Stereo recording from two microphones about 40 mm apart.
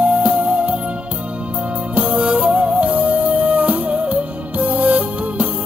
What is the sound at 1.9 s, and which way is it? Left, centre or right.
Music, right.